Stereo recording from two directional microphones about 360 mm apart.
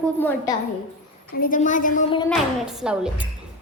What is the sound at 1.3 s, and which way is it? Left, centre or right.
Speech, left.